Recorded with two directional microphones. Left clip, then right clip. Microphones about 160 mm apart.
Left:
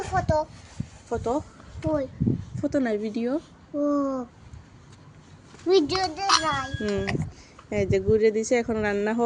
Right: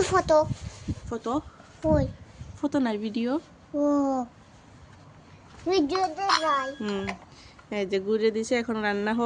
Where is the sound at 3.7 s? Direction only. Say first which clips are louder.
Right 1 dB; 35° right (ahead or behind).